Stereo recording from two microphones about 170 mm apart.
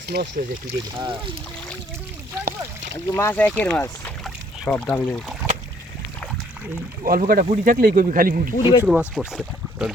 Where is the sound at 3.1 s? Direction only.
15° left (ahead or behind).